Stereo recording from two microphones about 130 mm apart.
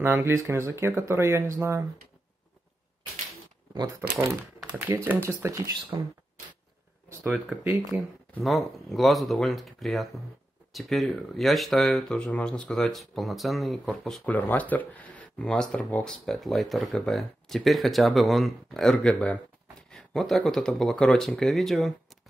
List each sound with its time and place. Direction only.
0.0 s speech: 20° right (ahead or behind)
3.7 s speech: 30° right (ahead or behind)
4.4 s speech: 10° right (ahead or behind)
7.2 s speech: 5° right (ahead or behind)